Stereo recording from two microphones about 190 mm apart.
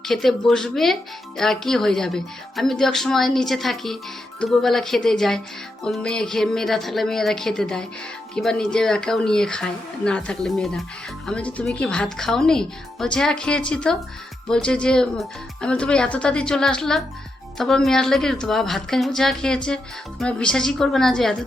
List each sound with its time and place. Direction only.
0.0 s a woman's voice: centre (ahead or behind)